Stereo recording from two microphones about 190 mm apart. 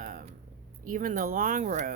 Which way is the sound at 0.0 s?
45° right (ahead or behind).